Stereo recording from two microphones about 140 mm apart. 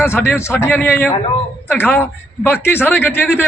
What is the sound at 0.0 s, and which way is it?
A man's voice, 15° left (ahead or behind).